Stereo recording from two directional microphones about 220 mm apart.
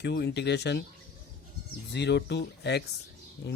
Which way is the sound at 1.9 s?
50° left (ahead or behind).